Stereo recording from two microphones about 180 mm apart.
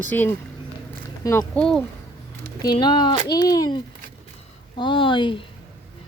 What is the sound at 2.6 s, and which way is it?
Speech, 25° left (ahead or behind).